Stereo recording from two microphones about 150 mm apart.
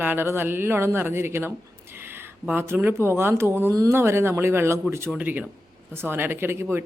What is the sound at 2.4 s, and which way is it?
Speech, 15° right (ahead or behind).